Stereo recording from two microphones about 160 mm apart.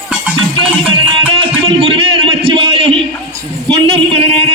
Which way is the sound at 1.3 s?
35° right (ahead or behind).